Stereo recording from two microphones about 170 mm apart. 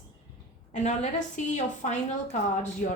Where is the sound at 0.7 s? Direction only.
45° left (ahead or behind).